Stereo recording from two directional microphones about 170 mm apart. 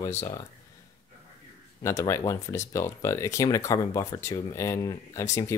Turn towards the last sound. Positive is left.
turn(degrees=20)  # may be behind; listen again after turning